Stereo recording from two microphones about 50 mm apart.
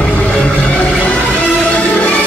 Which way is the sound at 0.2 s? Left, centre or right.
Left.